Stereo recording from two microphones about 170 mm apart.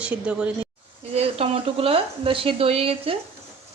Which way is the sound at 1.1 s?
35° right (ahead or behind).